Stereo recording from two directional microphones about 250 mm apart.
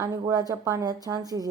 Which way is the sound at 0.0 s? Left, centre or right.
Centre.